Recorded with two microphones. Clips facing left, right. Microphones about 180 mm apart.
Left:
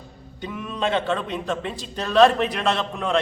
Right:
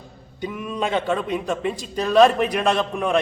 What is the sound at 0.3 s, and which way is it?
A man's voice, 10° right (ahead or behind).